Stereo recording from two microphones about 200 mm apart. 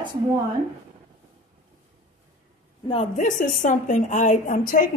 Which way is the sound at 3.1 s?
40° left (ahead or behind).